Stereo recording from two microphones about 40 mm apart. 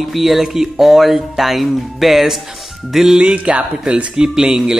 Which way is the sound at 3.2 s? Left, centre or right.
Right.